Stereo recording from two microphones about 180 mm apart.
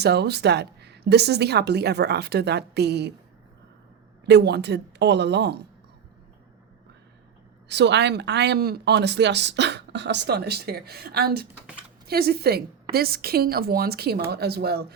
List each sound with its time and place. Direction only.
0.0 s speech: 65° right (ahead or behind)
4.3 s speech: 70° right (ahead or behind)
7.7 s speech: 75° right (ahead or behind)